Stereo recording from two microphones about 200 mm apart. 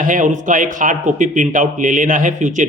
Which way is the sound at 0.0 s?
40° right (ahead or behind).